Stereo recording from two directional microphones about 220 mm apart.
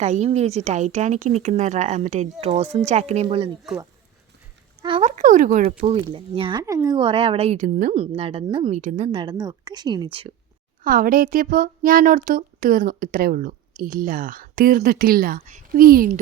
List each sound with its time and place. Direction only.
0.0 s speech: 30° right (ahead or behind)
4.8 s speech: 25° right (ahead or behind)
10.8 s speech: 40° right (ahead or behind)